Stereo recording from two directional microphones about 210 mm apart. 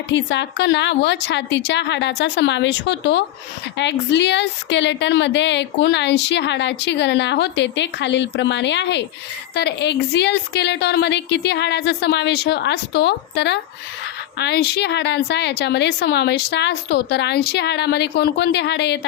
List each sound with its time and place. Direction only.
0.1 s a woman's voice: 55° left (ahead or behind)